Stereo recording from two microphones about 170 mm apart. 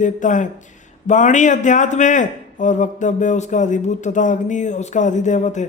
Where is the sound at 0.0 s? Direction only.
50° left (ahead or behind).